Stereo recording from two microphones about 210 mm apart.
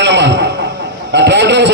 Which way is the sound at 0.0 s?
55° right (ahead or behind).